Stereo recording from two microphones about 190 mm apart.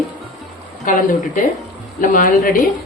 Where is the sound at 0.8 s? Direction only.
45° left (ahead or behind).